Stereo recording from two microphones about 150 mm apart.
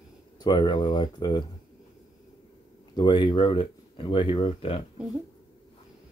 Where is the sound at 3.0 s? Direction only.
30° left (ahead or behind).